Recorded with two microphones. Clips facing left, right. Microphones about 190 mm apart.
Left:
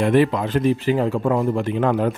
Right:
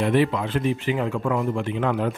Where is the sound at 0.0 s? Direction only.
45° left (ahead or behind).